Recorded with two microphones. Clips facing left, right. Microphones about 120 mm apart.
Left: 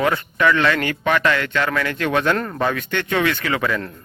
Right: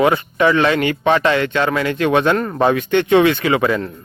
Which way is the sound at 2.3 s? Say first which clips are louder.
Right 4 dB; 5° right (ahead or behind).